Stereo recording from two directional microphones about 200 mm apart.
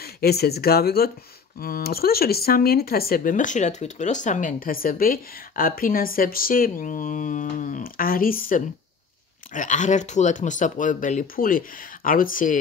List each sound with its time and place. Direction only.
0.0 s speech: 50° left (ahead or behind)